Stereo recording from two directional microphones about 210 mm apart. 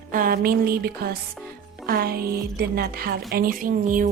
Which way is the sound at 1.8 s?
45° right (ahead or behind).